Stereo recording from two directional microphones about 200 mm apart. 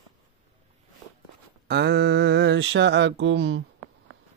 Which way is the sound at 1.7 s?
55° right (ahead or behind).